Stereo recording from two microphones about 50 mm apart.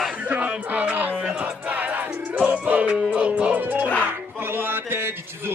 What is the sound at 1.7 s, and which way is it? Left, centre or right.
Music, right.